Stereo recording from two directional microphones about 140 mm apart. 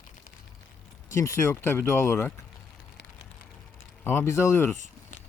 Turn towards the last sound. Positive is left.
turn(degrees=20)  # may be behind; listen again after turning